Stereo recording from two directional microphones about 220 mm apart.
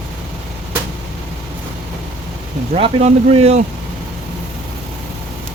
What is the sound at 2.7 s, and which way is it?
Speech, 30° right (ahead or behind).